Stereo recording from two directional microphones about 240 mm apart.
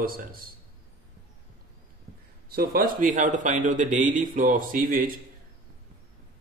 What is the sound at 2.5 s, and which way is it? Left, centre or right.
Speech, right.